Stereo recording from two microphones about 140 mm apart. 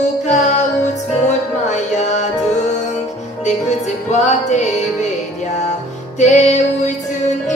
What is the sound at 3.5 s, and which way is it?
Music, 55° left (ahead or behind).